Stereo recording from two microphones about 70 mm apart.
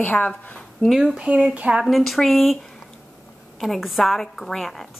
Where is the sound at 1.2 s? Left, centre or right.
Centre.